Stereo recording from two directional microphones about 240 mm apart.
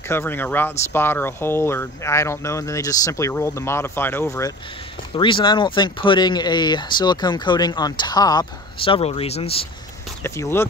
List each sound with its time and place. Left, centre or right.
0.1 s speech: centre
10.2 s speech: centre